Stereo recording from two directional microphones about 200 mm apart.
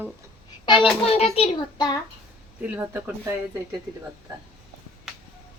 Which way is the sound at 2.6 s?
10° right (ahead or behind).